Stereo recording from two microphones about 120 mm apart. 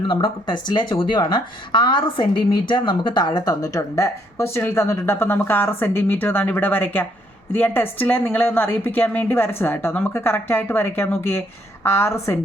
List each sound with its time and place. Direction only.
0.0 s speech: 40° left (ahead or behind); by 12.4 s 25° left (ahead or behind)